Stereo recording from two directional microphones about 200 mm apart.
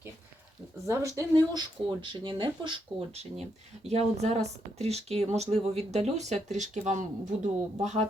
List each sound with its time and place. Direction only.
0.9 s speech: 15° right (ahead or behind); by 8.0 s 35° right (ahead or behind)